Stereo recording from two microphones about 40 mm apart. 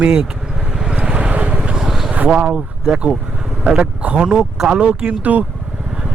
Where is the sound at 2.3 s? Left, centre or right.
Right.